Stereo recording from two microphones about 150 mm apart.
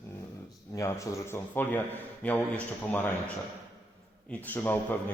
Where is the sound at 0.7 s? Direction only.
20° left (ahead or behind).